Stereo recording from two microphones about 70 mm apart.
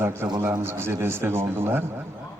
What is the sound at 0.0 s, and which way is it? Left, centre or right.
A man's voice, right.